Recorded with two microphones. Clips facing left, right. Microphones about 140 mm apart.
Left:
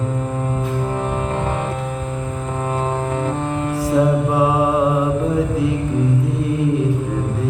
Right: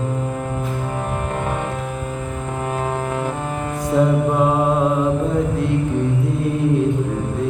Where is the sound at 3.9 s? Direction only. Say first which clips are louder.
Even; 5° left (ahead or behind).